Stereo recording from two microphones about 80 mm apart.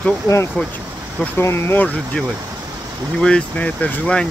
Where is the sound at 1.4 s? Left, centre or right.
Left.